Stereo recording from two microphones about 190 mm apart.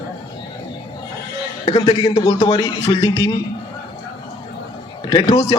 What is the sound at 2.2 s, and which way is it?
A man's voice, 20° left (ahead or behind).